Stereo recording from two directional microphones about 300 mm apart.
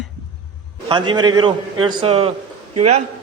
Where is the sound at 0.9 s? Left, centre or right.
Centre.